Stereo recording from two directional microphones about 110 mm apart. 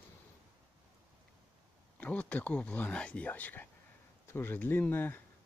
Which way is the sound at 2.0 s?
15° left (ahead or behind).